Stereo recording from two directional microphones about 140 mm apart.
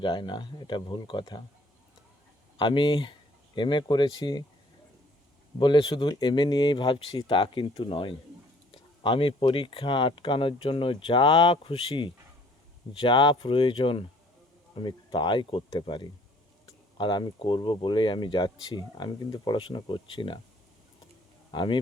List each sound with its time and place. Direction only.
0.0 s speech: 35° left (ahead or behind)
2.6 s speech: 35° left (ahead or behind)
5.5 s speech: 35° left (ahead or behind)
21.5 s speech: 35° left (ahead or behind)